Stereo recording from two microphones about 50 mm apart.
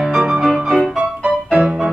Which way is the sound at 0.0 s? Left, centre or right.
Centre.